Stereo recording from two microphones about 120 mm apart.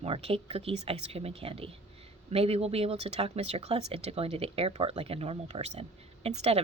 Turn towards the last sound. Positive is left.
turn(degrees=-65)  # may be behind; listen again after turning